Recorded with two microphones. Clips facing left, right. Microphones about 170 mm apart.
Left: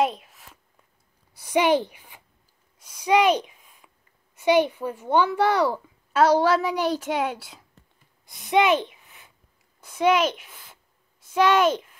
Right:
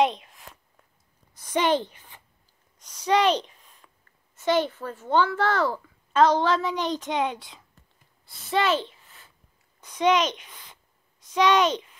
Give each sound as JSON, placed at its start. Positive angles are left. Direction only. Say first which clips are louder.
{"t": 0.0, "sound": "a sound", "louder": "right 1 dB", "side_deg": 5}
{"t": 4.4, "sound": "a child's voice", "louder": "left 4 dB", "side_deg": 15}
{"t": 8.3, "sound": "a child's voice", "louder": "left 4 dB", "side_deg": 15}